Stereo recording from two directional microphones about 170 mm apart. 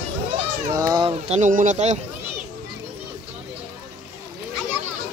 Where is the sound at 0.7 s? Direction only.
20° right (ahead or behind); by 2.0 s 45° right (ahead or behind).